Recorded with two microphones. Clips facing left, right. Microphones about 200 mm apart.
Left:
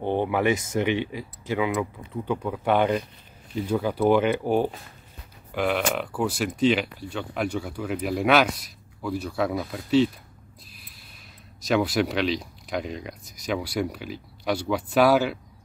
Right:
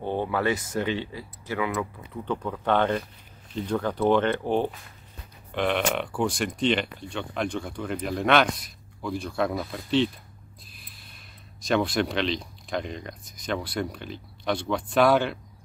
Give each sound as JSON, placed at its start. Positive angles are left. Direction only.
{"t": 0.0, "sound": "speech", "side_deg": 20}
{"t": 11.6, "sound": "speech", "side_deg": 5}